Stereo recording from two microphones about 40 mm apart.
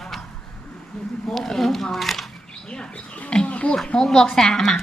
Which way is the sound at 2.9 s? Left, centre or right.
Left.